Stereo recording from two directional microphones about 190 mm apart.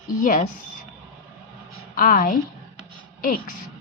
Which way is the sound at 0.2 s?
45° left (ahead or behind).